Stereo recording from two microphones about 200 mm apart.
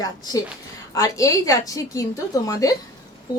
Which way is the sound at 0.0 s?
20° left (ahead or behind).